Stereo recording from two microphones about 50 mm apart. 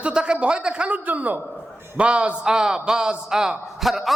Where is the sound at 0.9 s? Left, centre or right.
Right.